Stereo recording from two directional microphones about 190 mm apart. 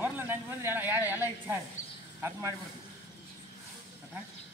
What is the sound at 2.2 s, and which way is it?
Speech, 15° right (ahead or behind).